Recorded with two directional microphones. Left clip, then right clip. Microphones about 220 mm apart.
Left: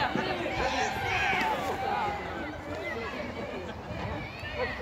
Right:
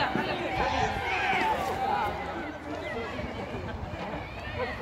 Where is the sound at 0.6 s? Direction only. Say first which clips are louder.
Right 2 dB; 50° left (ahead or behind).